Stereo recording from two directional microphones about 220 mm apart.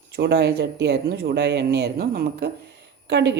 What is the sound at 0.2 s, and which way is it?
Speech, 50° right (ahead or behind).